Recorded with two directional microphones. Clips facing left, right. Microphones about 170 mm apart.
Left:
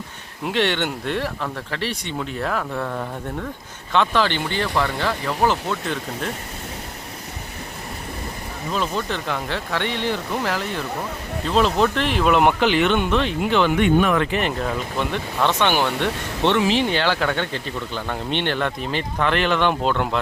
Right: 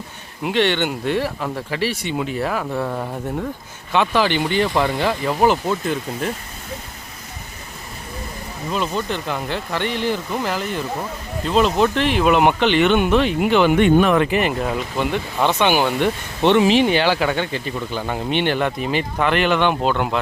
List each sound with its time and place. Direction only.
0.4 s speech: centre (ahead or behind)
8.7 s speech: centre (ahead or behind)
13.7 s speech: 30° right (ahead or behind)
14.2 s speech: 5° right (ahead or behind)